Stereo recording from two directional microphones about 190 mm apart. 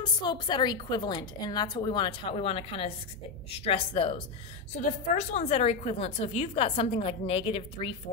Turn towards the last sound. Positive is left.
turn(degrees=30)  # may be behind; listen again after turning